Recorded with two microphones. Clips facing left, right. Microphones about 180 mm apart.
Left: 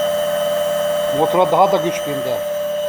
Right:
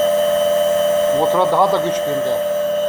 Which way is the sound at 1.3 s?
15° left (ahead or behind).